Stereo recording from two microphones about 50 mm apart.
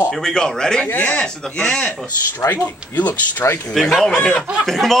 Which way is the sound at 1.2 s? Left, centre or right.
Left.